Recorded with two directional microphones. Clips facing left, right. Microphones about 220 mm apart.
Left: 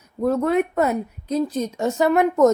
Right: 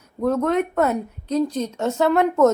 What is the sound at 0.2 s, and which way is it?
Speech, 5° left (ahead or behind).